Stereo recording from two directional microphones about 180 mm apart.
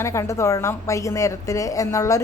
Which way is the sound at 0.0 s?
15° left (ahead or behind).